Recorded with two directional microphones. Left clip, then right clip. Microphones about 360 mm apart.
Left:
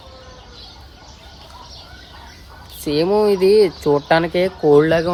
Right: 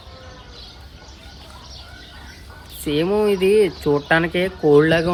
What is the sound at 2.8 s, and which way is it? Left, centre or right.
Speech, centre.